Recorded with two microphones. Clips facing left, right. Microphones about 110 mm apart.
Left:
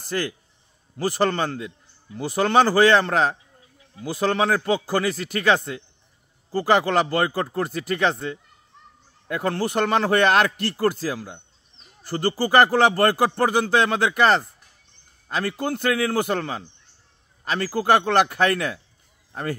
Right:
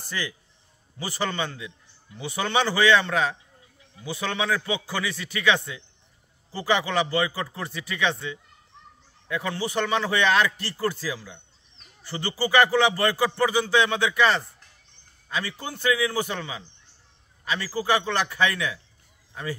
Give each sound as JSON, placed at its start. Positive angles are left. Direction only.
{"t": 0.1, "sound": "speech", "side_deg": 50}